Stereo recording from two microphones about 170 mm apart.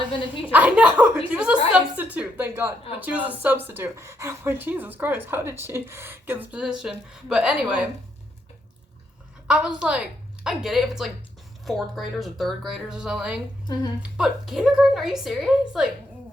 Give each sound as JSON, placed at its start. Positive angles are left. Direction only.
{"t": 0.5, "sound": "a woman's voice", "side_deg": -10}
{"t": 9.5, "sound": "speech", "side_deg": -5}